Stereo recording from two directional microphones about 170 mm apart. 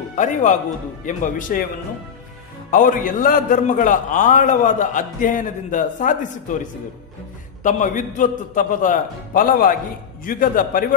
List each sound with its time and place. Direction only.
0.1 s a man's voice: 45° left (ahead or behind)
2.7 s a man's voice: 55° left (ahead or behind)
7.6 s a man's voice: 50° left (ahead or behind)